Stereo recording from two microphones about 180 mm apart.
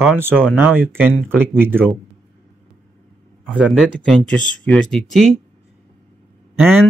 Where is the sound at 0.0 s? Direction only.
10° right (ahead or behind).